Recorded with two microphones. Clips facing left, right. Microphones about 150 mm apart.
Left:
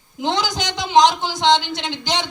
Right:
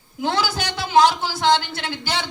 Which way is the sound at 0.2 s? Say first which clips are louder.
Left 1 dB; 20° left (ahead or behind).